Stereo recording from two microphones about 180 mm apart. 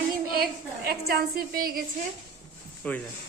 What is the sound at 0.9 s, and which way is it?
Speech, 60° right (ahead or behind).